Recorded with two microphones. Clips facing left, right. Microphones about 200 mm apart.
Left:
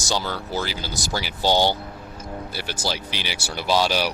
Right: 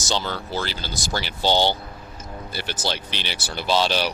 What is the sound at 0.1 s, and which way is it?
Speech, 10° left (ahead or behind).